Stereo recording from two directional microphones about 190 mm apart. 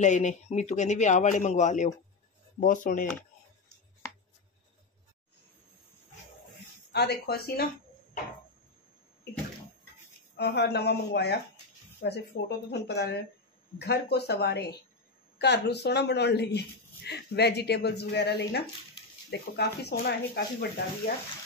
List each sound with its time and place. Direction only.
0.0 s speech: 40° left (ahead or behind)
6.9 s speech: 60° left (ahead or behind)
10.3 s speech: 60° left (ahead or behind)